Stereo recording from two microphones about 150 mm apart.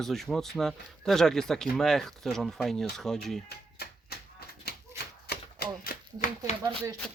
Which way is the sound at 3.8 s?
90° left.